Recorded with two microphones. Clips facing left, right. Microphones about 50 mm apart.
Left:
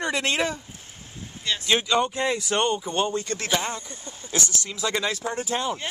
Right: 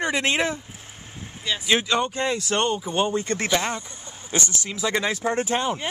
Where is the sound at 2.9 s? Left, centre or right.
Centre; by 3.8 s right.